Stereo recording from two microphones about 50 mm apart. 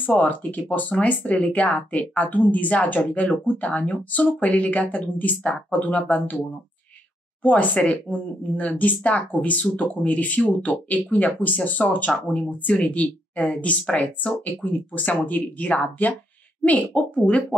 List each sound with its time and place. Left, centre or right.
0.1 s speech: left
7.4 s speech: left